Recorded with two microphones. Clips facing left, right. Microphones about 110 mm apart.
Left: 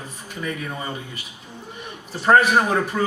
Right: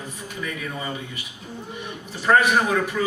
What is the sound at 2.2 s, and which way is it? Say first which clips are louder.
Speech: left 2 dB; 35° left (ahead or behind).